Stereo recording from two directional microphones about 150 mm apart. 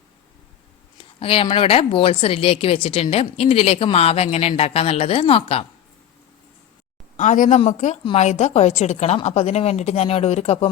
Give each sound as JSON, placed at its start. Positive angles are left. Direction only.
{"t": 0.9, "sound": "speech", "side_deg": 40}
{"t": 7.2, "sound": "a woman's voice", "side_deg": 55}